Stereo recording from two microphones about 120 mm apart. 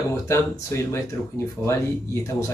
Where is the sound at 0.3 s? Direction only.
25° left (ahead or behind).